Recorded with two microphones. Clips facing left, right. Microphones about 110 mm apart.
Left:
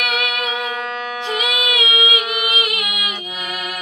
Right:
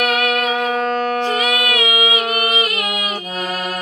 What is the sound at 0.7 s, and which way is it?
Music, 50° right (ahead or behind).